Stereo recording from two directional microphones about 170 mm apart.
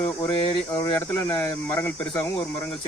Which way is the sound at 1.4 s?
10° left (ahead or behind).